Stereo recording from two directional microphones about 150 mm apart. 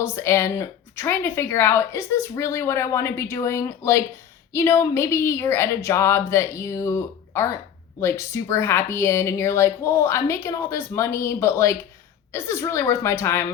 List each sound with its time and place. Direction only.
0.0 s speech: 15° left (ahead or behind)